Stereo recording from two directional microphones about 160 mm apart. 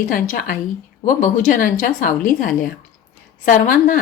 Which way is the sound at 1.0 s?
55° left (ahead or behind).